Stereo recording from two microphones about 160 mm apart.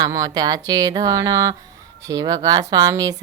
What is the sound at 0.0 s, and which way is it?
Speech, 25° right (ahead or behind).